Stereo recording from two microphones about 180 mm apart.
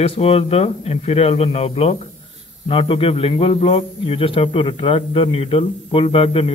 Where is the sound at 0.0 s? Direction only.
30° left (ahead or behind).